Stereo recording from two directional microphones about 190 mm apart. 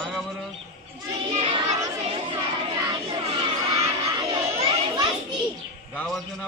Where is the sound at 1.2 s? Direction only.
35° right (ahead or behind).